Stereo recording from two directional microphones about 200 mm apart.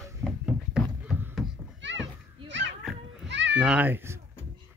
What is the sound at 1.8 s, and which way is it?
Children playing, 65° right (ahead or behind).